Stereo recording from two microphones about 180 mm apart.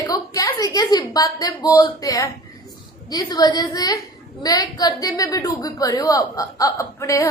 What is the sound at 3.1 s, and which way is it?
A woman's voice, 20° left (ahead or behind).